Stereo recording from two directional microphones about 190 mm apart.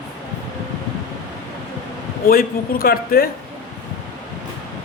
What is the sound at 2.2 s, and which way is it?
A man's voice, 50° left (ahead or behind).